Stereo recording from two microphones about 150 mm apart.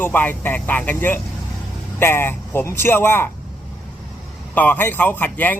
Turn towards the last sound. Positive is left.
turn(degrees=10)  # may be behind; listen again after turning